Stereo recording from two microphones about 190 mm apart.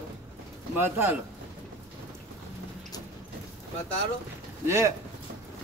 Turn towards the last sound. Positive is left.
turn(degrees=-15)  # may be behind; listen again after turning